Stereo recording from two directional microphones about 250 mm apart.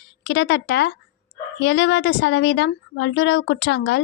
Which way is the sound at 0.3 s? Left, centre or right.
Left.